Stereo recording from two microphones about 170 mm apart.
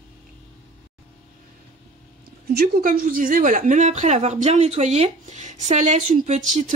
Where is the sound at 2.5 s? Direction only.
60° right (ahead or behind).